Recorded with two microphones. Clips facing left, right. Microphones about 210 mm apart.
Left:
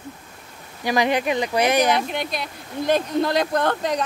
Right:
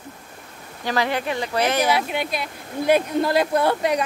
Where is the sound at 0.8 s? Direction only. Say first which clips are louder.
Left 3 dB; 15° left (ahead or behind).